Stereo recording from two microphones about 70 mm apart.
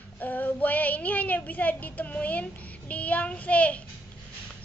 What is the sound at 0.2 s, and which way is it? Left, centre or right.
Child singing, left.